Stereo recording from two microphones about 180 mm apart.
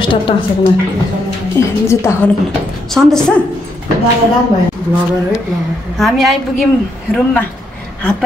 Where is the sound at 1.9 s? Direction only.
15° left (ahead or behind).